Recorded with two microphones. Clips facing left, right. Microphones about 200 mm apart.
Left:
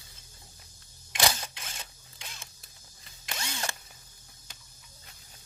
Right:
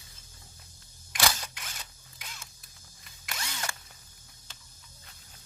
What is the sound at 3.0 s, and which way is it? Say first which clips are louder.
Drill: left 2 dB; 25° left (ahead or behind).